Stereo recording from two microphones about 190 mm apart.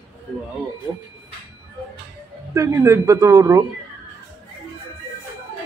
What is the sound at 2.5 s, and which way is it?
Speech, 15° right (ahead or behind).